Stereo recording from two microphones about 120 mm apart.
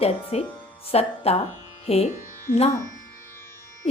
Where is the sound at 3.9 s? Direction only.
55° left (ahead or behind).